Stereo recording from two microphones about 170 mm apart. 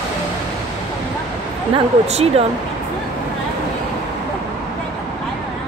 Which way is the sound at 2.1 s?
40° right (ahead or behind).